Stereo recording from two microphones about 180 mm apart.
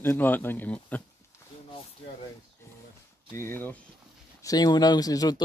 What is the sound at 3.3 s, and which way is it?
Speech, 15° left (ahead or behind).